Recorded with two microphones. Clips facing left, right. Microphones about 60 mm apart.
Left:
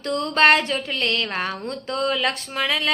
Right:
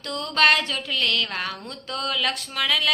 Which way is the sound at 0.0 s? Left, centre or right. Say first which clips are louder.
Left 3 dB; left.